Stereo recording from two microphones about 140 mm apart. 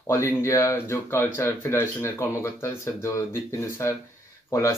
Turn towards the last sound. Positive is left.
turn(degrees=20)  # may be behind; listen again after turning